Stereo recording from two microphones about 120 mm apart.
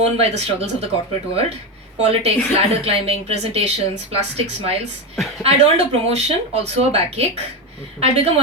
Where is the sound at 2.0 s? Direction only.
60° right (ahead or behind).